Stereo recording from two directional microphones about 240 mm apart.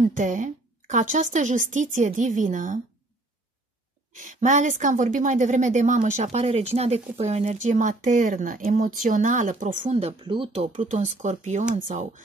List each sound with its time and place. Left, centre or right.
0.0 s speech: right
4.1 s speech: right